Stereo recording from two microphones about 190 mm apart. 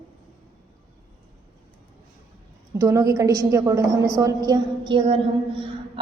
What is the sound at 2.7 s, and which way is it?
A woman's voice, 15° right (ahead or behind).